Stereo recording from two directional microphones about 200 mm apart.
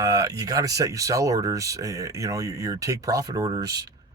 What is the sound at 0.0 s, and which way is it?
Speech, 15° right (ahead or behind).